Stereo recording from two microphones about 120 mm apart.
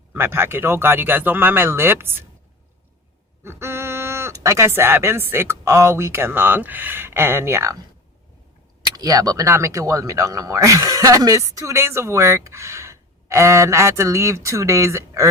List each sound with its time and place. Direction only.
0.1 s speech: 20° right (ahead or behind)
3.4 s speech: 20° right (ahead or behind)
9.0 s speech: 30° right (ahead or behind)